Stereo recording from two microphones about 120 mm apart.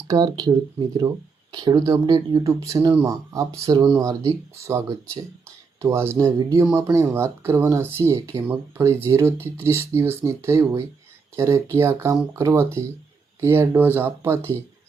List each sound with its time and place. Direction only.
0.1 s speech: 30° right (ahead or behind)